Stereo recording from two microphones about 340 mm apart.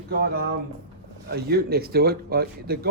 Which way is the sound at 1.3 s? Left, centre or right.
Right.